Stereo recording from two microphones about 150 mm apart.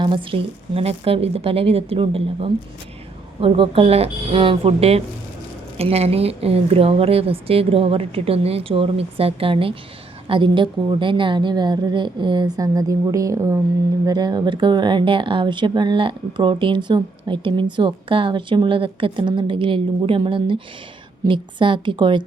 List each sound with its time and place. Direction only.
0.0 s speech: 35° right (ahead or behind)